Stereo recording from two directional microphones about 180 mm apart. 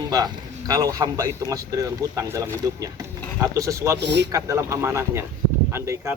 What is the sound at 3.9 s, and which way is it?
Speech, 70° right (ahead or behind).